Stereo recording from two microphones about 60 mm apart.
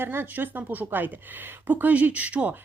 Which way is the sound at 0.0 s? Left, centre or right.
Right.